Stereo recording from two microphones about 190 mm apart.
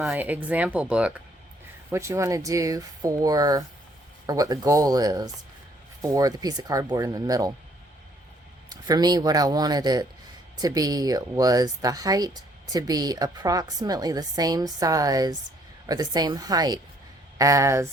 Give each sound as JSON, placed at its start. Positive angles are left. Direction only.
{"t": 0.0, "sound": "speech", "side_deg": -5}
{"t": 8.7, "sound": "speech", "side_deg": -20}